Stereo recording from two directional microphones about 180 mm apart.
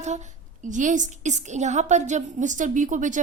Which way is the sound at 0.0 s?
40° right (ahead or behind).